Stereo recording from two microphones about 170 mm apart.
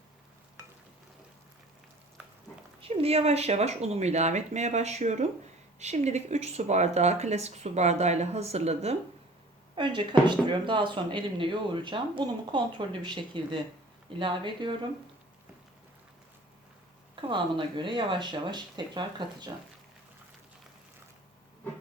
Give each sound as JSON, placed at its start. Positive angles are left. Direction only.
{"t": 2.8, "sound": "speech", "side_deg": -35}
{"t": 9.7, "sound": "speech", "side_deg": -30}
{"t": 17.2, "sound": "speech", "side_deg": -30}